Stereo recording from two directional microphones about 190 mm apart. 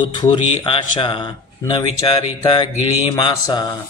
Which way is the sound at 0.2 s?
25° left (ahead or behind).